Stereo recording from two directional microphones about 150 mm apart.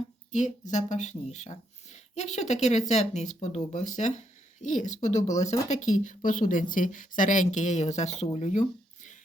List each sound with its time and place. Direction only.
0.3 s a woman's voice: 55° left (ahead or behind)